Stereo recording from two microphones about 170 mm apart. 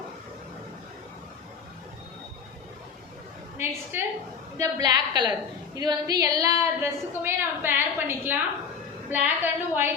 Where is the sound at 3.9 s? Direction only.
15° right (ahead or behind).